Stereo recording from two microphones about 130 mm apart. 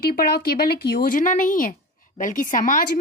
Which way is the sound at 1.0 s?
90° left.